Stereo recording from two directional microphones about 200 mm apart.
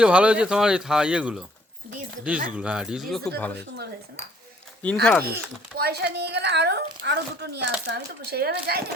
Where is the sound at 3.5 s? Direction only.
55° right (ahead or behind).